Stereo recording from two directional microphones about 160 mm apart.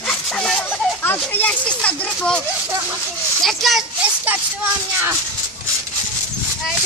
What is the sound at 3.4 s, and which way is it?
Speech, centre (ahead or behind).